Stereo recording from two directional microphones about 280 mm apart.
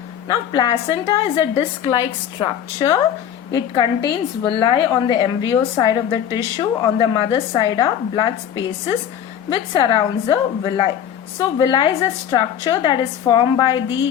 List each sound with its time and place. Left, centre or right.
0.3 s a woman's voice: centre